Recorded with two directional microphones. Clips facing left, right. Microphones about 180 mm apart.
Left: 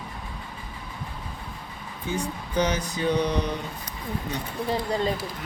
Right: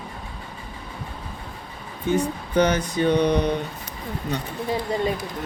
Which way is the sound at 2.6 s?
60° right (ahead or behind).